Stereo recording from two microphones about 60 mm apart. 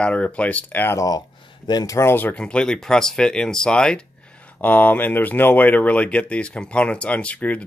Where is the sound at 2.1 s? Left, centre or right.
Left.